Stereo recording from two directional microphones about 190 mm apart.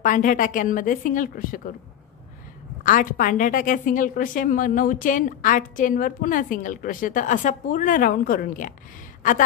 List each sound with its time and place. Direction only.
0.0 s a woman's voice: 45° left (ahead or behind)
2.8 s a woman's voice: 45° left (ahead or behind)